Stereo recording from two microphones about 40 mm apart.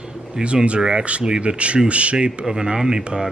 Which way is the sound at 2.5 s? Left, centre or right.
Centre.